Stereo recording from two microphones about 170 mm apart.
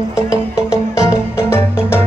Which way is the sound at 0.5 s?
20° left (ahead or behind).